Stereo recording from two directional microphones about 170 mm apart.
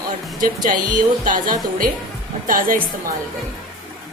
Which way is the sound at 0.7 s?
50° right (ahead or behind).